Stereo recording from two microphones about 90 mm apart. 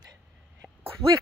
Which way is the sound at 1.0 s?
90° right.